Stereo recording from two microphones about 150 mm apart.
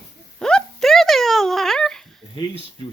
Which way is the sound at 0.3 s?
5° left (ahead or behind).